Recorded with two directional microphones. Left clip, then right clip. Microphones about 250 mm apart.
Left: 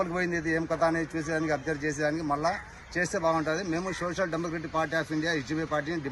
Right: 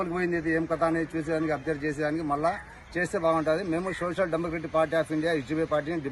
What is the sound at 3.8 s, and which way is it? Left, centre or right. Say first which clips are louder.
Speech: right 2 dB; centre.